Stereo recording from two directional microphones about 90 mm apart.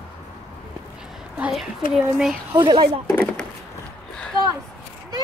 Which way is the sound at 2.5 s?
75° right (ahead or behind).